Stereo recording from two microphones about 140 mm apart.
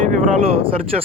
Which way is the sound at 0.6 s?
45° right (ahead or behind).